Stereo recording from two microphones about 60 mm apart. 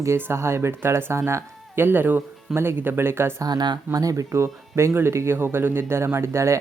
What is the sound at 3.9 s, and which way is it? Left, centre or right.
Speech, right.